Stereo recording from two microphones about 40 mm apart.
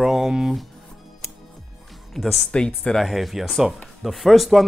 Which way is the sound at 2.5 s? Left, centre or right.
Left.